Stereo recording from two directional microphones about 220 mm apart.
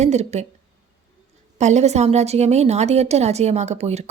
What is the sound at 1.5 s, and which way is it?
A woman's voice, 30° right (ahead or behind).